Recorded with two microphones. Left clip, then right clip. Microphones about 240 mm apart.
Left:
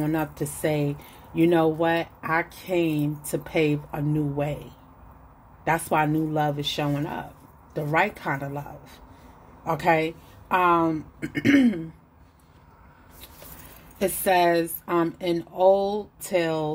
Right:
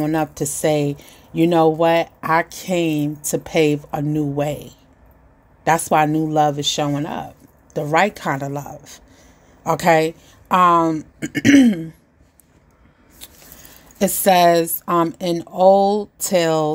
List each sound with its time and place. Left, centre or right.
0.0 s speech: right
13.9 s speech: right